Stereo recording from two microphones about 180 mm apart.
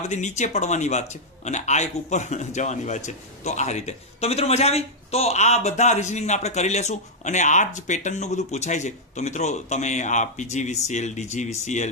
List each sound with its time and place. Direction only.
0.1 s a man's voice: 40° left (ahead or behind)